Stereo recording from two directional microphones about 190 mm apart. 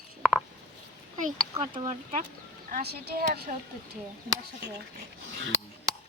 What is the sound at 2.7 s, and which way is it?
Speech, 55° right (ahead or behind).